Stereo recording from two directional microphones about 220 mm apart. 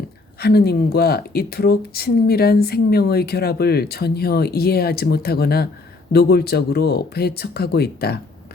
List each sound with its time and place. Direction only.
0.3 s speech: 45° left (ahead or behind)